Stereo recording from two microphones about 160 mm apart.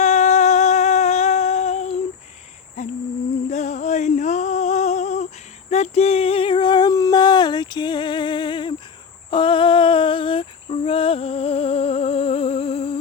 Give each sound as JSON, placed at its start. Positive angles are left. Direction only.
{"t": 0.0, "sound": "humming", "side_deg": 45}
{"t": 2.8, "sound": "cricket", "side_deg": 45}
{"t": 3.5, "sound": "a sound", "side_deg": 45}
{"t": 9.3, "sound": "cricket", "side_deg": 30}